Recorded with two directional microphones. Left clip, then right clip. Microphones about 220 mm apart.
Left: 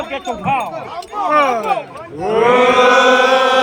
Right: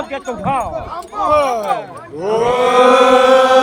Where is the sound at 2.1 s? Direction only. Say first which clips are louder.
Left 3 dB; 55° right (ahead or behind).